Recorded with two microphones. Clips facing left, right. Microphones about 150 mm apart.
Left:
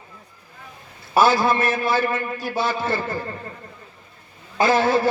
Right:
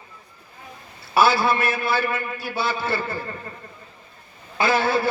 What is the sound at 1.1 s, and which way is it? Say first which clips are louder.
A man's voice: left 1 dB; 45° left (ahead or behind).